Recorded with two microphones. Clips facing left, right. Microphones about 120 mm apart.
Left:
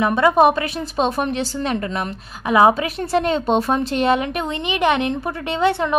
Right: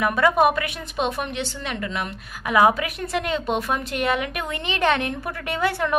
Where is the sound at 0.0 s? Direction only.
25° left (ahead or behind).